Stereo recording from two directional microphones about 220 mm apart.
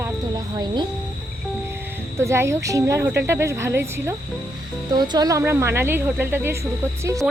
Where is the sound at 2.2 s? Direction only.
10° right (ahead or behind).